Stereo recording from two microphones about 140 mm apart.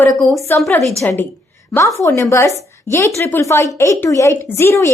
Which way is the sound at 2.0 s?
20° left (ahead or behind).